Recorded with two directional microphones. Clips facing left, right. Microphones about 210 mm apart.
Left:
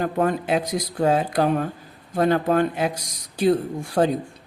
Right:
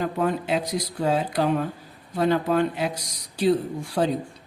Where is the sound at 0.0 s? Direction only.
50° left (ahead or behind).